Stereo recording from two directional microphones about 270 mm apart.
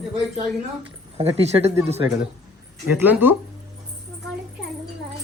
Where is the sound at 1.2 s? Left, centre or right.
Right; by 3.3 s centre.